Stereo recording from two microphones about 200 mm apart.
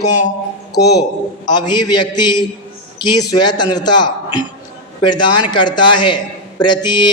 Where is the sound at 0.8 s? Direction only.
55° left (ahead or behind).